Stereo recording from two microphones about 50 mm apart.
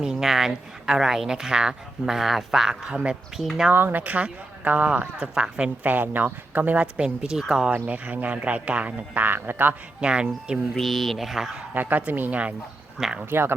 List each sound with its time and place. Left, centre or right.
0.0 s speech: centre
2.9 s speech: right
3.7 s speech: right; by 5.7 s centre
5.8 s speech: right
6.9 s speech: centre
7.9 s speech: right
10.0 s speech: centre
10.8 s speech: centre
11.7 s speech: right
13.0 s speech: centre